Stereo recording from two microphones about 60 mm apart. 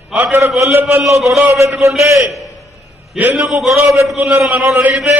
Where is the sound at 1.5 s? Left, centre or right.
Right.